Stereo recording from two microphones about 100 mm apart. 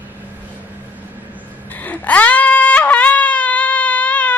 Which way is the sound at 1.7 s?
15° left (ahead or behind).